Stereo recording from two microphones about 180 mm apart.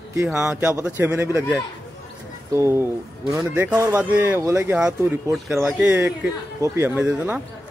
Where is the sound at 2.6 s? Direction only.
15° right (ahead or behind).